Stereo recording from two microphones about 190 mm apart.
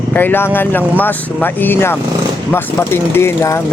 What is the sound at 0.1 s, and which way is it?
Speech, 10° left (ahead or behind).